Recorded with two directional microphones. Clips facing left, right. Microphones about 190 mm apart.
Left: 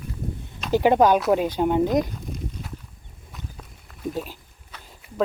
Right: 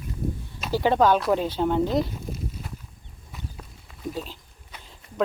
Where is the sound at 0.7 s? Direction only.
15° left (ahead or behind).